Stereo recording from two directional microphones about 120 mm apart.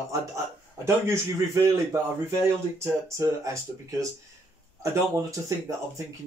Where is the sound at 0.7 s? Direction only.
25° right (ahead or behind).